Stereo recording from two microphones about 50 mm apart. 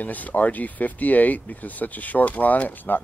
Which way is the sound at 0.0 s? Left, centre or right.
Left.